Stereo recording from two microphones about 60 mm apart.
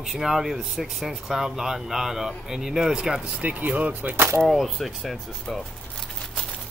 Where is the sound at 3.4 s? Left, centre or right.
Right.